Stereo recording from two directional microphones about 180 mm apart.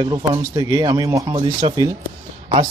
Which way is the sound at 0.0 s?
25° right (ahead or behind).